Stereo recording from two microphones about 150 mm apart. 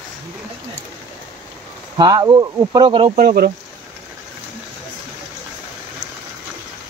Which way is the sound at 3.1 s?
85° right.